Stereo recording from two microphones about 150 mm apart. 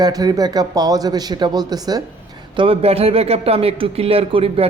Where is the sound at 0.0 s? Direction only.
25° right (ahead or behind).